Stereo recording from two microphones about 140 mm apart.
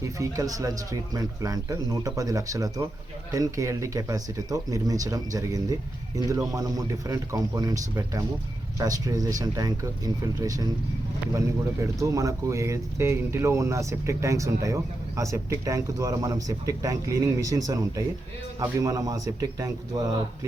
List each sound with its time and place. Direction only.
0.0 s speech: 25° right (ahead or behind)